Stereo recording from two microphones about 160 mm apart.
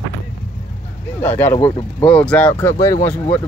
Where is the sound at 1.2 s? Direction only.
10° left (ahead or behind).